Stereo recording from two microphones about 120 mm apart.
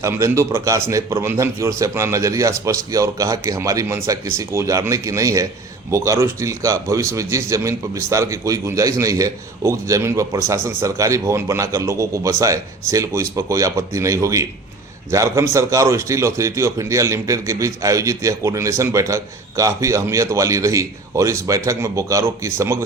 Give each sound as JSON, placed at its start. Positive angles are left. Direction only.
{"t": 0.0, "sound": "a man's voice", "side_deg": -25}